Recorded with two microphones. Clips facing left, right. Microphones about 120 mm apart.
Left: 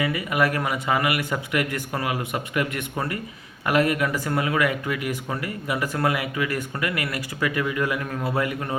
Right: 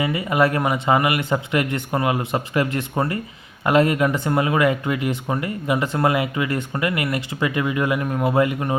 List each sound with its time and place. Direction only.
0.0 s speech: 25° right (ahead or behind)